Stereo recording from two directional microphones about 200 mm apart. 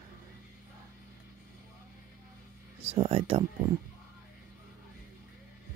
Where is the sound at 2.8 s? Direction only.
30° right (ahead or behind).